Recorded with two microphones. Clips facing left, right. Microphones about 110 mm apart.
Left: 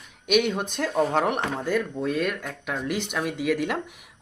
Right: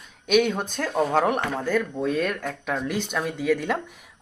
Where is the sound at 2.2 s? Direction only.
5° left (ahead or behind).